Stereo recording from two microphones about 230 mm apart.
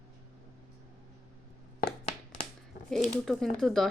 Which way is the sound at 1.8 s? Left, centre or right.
Left.